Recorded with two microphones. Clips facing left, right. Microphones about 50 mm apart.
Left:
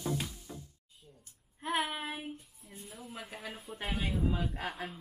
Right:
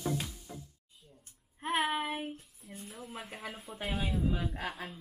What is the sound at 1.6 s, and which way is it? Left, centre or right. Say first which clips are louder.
Child singing: right 3 dB; right.